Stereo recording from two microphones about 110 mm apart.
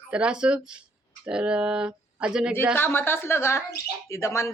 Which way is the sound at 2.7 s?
20° left (ahead or behind).